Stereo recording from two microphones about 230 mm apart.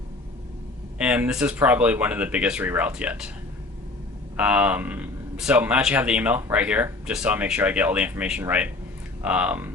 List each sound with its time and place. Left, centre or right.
0.9 s speech: centre
4.4 s speech: centre